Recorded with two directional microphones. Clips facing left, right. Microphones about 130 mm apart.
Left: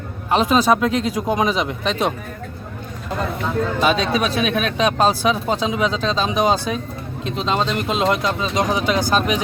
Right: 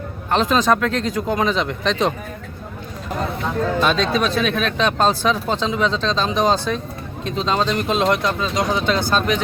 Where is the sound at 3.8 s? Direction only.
10° left (ahead or behind).